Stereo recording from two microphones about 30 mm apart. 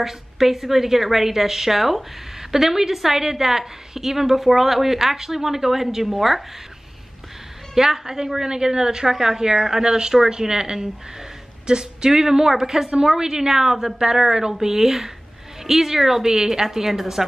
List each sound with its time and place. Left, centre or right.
0.0 s a woman's voice: centre
7.7 s a woman's voice: centre